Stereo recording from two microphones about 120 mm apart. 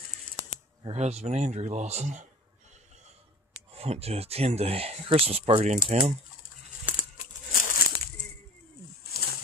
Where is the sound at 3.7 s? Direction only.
55° right (ahead or behind).